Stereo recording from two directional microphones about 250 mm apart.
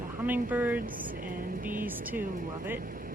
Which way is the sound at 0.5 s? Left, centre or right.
Centre.